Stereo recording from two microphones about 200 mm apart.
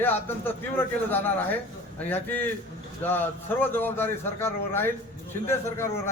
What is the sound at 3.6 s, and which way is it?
A man's voice, 10° left (ahead or behind).